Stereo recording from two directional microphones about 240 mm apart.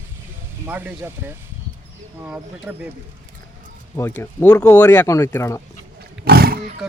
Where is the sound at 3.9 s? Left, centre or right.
Centre.